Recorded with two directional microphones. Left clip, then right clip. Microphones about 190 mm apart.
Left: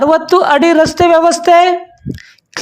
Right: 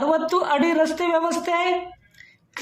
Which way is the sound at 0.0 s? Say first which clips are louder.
Left 11 dB; 50° left (ahead or behind).